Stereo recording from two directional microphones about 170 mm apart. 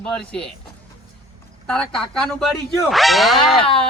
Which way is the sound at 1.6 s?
5° left (ahead or behind).